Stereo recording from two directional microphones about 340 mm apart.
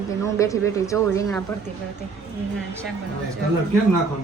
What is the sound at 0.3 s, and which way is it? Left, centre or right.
A woman's voice, centre.